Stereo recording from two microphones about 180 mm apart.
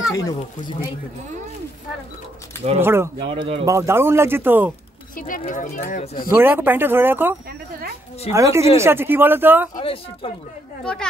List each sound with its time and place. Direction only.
0.1 s speech: 20° left (ahead or behind)
2.8 s speech: 15° right (ahead or behind)
3.3 s speech: 30° right (ahead or behind)
3.6 s speech: 15° right (ahead or behind)
5.1 s speech: 50° left (ahead or behind)
6.3 s speech: 10° right (ahead or behind)
9.8 s speech: 30° left (ahead or behind)
10.8 s a woman's voice: 5° left (ahead or behind)